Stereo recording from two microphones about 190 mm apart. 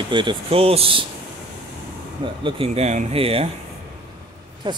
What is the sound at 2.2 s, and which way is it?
Speech, 25° right (ahead or behind).